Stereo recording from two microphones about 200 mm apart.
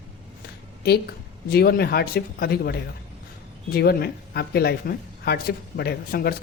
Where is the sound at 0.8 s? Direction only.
50° left (ahead or behind).